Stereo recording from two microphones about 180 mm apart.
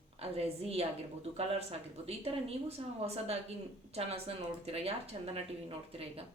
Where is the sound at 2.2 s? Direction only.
35° right (ahead or behind).